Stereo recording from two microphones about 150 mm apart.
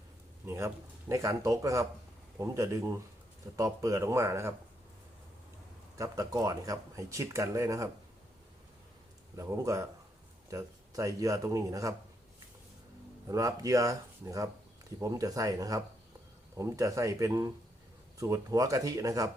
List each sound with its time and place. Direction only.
0.4 s speech: 20° right (ahead or behind)
6.0 s speech: 25° right (ahead or behind)
9.5 s speech: 20° right (ahead or behind)
13.2 s speech: 20° right (ahead or behind)